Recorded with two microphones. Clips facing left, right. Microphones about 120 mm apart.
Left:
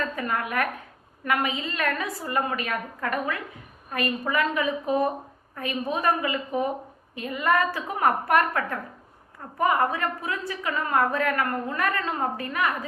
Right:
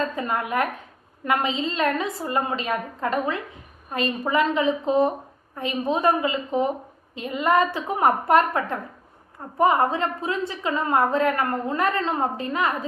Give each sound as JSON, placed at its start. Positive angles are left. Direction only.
{"t": 0.0, "sound": "a woman's voice", "side_deg": -25}